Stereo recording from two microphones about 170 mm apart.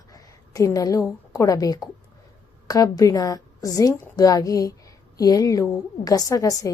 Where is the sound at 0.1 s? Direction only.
20° left (ahead or behind).